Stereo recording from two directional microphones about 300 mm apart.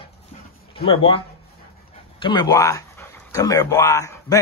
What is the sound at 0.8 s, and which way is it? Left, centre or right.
Speech, centre.